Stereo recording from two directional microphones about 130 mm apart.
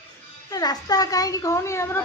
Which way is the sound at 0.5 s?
30° left (ahead or behind).